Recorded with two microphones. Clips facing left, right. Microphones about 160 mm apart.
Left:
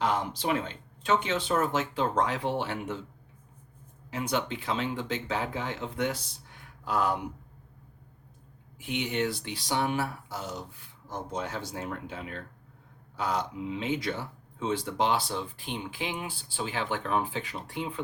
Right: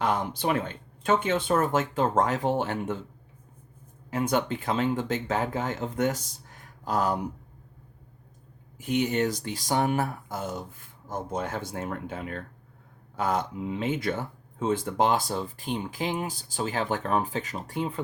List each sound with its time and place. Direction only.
0.0 s speech: 55° right (ahead or behind)
4.1 s speech: 50° right (ahead or behind)
8.8 s speech: 40° right (ahead or behind)